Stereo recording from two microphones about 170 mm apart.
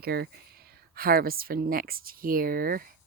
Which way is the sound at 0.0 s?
65° right (ahead or behind).